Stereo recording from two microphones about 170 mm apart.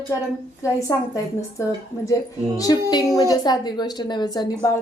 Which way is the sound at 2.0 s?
20° left (ahead or behind).